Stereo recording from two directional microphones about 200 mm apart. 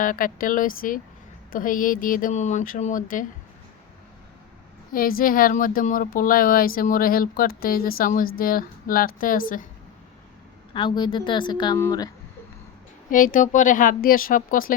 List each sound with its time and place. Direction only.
0.0 s speech: 45° left (ahead or behind)
4.9 s speech: 45° left (ahead or behind)
10.8 s a woman's voice: 25° left (ahead or behind)
13.1 s speech: 40° left (ahead or behind)